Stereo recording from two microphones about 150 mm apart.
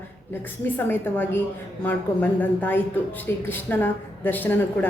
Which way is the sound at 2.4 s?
10° left (ahead or behind).